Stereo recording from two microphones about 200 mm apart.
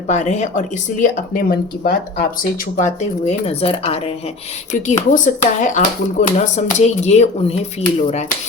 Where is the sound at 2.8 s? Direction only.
35° left (ahead or behind).